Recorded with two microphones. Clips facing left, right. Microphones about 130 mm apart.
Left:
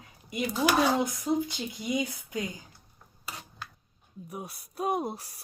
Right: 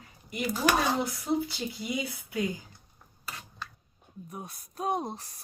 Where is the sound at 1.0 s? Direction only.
20° left (ahead or behind).